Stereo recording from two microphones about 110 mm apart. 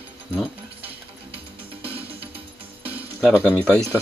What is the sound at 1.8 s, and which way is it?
Music, 60° right (ahead or behind).